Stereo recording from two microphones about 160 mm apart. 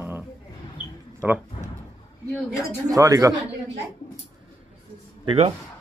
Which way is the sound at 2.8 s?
20° right (ahead or behind).